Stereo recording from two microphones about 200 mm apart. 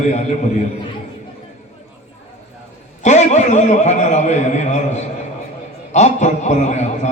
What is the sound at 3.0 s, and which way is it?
A man's voice, 35° left (ahead or behind).